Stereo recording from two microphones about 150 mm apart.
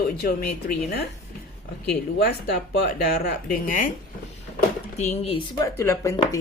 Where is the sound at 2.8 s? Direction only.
75° left (ahead or behind).